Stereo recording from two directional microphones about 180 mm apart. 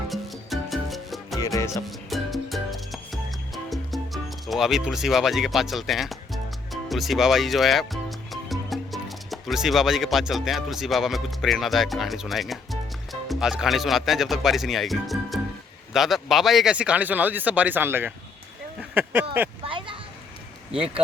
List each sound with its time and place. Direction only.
0.1 s music: centre (ahead or behind)
1.4 s music: 20° left (ahead or behind)
1.9 s music: centre (ahead or behind)
8.3 s speech: centre (ahead or behind)
19.6 s a sound: 30° right (ahead or behind)